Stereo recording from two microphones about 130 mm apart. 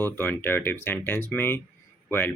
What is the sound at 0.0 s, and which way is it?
Speech, 15° left (ahead or behind).